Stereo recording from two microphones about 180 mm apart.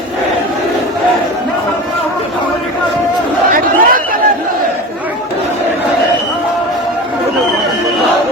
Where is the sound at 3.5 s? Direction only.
50° right (ahead or behind).